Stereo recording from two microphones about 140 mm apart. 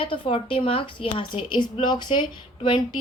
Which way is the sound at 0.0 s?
40° left (ahead or behind).